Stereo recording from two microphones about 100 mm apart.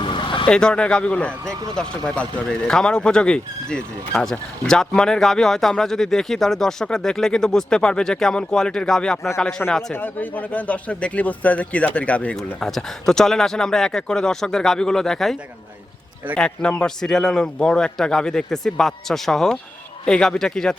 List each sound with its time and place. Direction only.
0.0 s vehicle: 55° left (ahead or behind)
0.4 s a man's voice: 10° left (ahead or behind)
9.9 s a man's voice: 20° left (ahead or behind)